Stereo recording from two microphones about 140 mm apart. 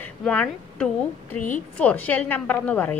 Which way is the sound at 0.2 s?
5° left (ahead or behind).